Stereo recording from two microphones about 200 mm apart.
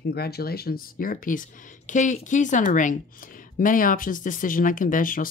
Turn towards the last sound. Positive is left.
turn(degrees=45)  # may be behind; listen again after turning